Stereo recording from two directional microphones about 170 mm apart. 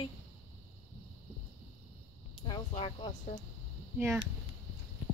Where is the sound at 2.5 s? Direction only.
30° left (ahead or behind).